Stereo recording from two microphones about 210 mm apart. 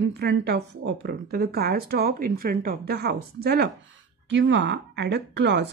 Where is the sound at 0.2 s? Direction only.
50° right (ahead or behind).